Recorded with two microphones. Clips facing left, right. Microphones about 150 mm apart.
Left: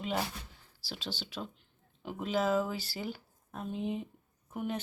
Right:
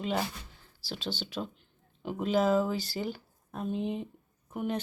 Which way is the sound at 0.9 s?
5° left (ahead or behind).